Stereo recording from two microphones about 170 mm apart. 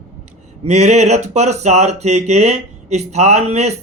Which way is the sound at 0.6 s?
40° right (ahead or behind).